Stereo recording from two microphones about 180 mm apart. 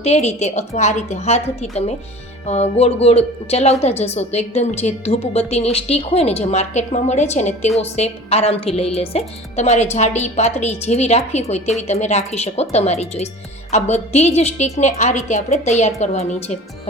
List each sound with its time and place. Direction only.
0.0 s a woman's voice: 35° left (ahead or behind)